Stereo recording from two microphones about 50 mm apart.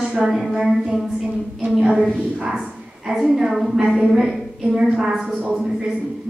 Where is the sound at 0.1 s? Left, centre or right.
Centre.